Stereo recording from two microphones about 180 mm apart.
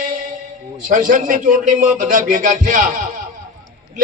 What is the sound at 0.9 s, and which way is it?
Speech, 45° right (ahead or behind).